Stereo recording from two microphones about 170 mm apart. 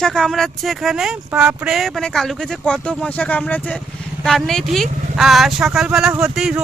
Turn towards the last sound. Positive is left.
turn(degrees=-5)  # may be behind; listen again after turning